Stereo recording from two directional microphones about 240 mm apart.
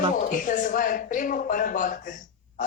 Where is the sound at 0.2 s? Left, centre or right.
Left.